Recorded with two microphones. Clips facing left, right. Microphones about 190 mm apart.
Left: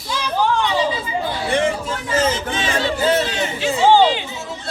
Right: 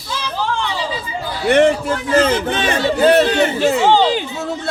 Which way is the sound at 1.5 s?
65° right (ahead or behind).